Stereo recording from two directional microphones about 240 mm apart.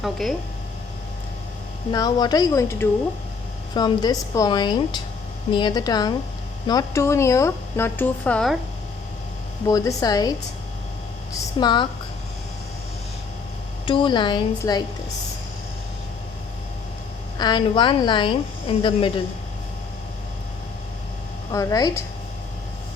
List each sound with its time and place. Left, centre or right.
0.0 s speech: centre
1.9 s speech: centre
9.6 s speech: centre
11.6 s a woman's voice: centre
13.8 s a woman's voice: left
17.3 s a woman's voice: centre
21.5 s speech: centre